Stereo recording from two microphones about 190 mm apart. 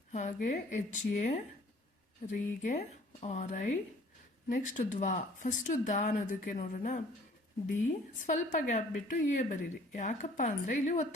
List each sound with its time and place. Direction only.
0.1 s speech: 45° left (ahead or behind)
8.2 s speech: 40° left (ahead or behind)